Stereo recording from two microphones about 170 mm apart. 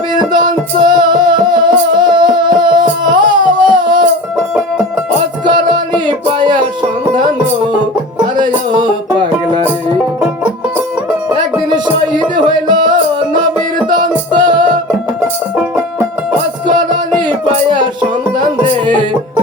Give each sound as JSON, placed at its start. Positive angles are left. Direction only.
{"t": 0.1, "sound": "music", "side_deg": -25}
{"t": 3.6, "sound": "a sound", "side_deg": -25}
{"t": 5.5, "sound": "music", "side_deg": -25}
{"t": 10.2, "sound": "music", "side_deg": -10}
{"t": 11.7, "sound": "music", "side_deg": -25}
{"t": 15.2, "sound": "music", "side_deg": -5}
{"t": 16.6, "sound": "music", "side_deg": -25}